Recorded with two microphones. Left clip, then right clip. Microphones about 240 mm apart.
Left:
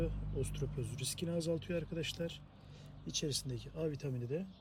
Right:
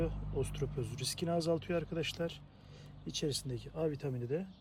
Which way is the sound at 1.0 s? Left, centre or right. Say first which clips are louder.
Right 4 dB; centre.